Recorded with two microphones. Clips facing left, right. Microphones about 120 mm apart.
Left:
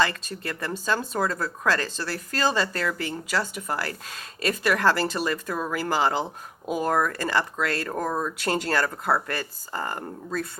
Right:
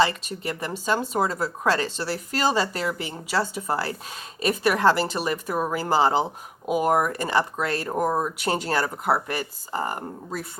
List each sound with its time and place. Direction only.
0.4 s speech: 20° right (ahead or behind)